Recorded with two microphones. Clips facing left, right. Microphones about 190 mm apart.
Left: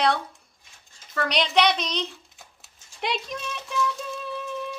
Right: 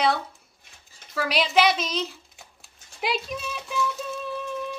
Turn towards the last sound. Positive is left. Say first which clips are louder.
# right 1 dB
turn(degrees=0)  # may be behind; listen again after turning